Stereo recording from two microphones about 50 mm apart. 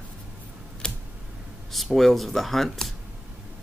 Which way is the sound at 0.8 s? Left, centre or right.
Centre.